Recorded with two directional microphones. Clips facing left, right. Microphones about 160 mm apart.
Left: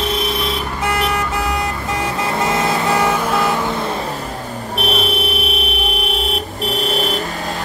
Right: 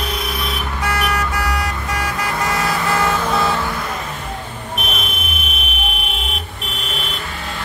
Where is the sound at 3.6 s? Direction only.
25° left (ahead or behind).